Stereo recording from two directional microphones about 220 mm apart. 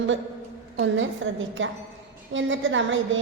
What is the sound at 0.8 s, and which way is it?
A woman's voice, 60° right (ahead or behind).